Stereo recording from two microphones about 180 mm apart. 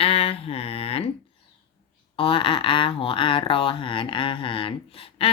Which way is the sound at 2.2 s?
30° left (ahead or behind).